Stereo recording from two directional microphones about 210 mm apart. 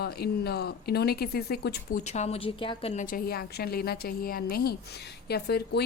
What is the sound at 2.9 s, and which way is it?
A woman's voice, 40° left (ahead or behind).